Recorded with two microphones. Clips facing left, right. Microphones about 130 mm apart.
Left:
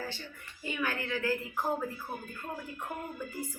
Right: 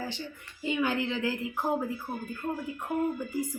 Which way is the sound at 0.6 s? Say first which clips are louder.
Right 6 dB; 20° right (ahead or behind).